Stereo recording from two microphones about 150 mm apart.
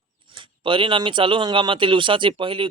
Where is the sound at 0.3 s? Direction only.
35° right (ahead or behind).